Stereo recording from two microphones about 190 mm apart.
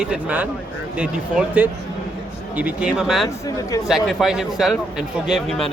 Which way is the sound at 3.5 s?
20° left (ahead or behind).